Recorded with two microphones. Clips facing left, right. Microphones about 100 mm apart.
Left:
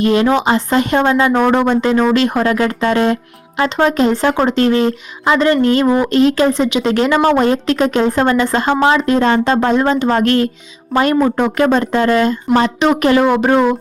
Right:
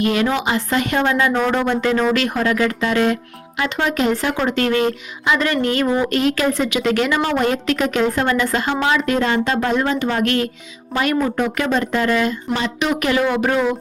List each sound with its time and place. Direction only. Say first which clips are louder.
0.0 s a woman's voice: left 6 dB; 30° left (ahead or behind)